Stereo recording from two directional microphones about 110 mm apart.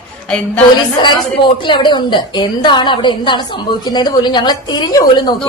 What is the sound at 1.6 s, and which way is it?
A woman's voice, 45° left (ahead or behind).